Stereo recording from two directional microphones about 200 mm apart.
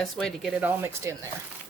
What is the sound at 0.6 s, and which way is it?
Speech, 10° right (ahead or behind).